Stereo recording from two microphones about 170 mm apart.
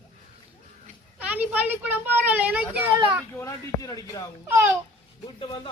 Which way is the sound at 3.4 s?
20° left (ahead or behind).